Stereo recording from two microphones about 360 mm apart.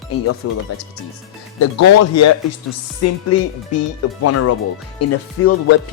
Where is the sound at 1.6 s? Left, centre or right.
Left.